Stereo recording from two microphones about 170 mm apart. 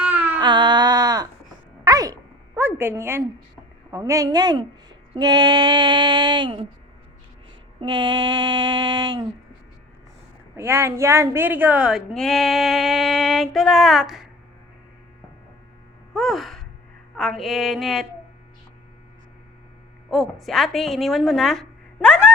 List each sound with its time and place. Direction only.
0.0 s a sound: 10° right (ahead or behind)
0.3 s a sound: 25° right (ahead or behind)
2.6 s a woman's voice: 15° right (ahead or behind)
7.8 s speech: 25° right (ahead or behind)
10.5 s a woman's voice: 15° right (ahead or behind)
16.1 s sigh: centre (ahead or behind)
17.2 s a woman's voice: centre (ahead or behind)
20.1 s a woman's voice: centre (ahead or behind)